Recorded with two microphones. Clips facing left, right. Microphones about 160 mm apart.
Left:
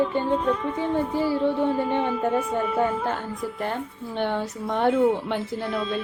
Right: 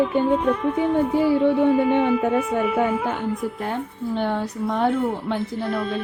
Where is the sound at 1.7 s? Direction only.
10° right (ahead or behind).